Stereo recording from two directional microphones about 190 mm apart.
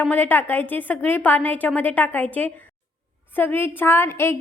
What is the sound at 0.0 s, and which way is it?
A woman's voice, 10° left (ahead or behind).